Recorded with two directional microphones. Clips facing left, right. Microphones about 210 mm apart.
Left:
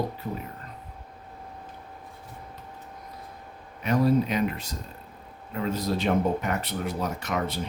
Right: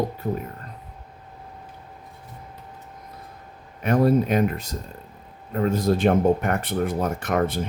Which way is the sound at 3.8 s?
50° right (ahead or behind).